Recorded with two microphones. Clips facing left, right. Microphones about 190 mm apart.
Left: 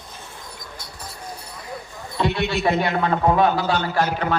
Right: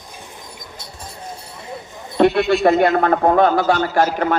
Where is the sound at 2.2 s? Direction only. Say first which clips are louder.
Right 8 dB; 55° right (ahead or behind).